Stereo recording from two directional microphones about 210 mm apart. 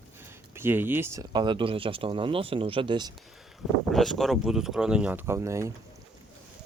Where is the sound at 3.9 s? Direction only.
Centre (ahead or behind).